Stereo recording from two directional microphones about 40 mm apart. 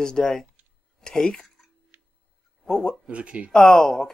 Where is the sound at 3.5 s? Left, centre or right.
Centre.